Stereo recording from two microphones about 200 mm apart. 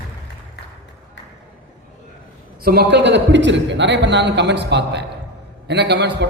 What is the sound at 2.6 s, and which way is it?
A man's voice, 50° right (ahead or behind).